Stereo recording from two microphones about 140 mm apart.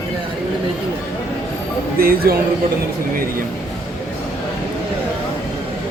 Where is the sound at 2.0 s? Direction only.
90° right.